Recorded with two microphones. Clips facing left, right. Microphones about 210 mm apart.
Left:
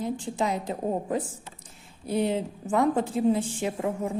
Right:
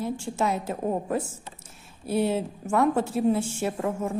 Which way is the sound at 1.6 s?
15° left (ahead or behind).